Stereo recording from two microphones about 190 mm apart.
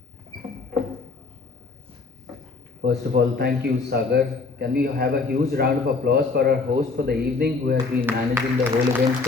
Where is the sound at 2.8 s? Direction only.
55° right (ahead or behind).